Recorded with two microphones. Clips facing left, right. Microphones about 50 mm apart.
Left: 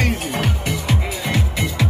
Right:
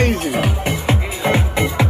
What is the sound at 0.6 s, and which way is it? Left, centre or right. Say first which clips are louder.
Music: right 3 dB; right.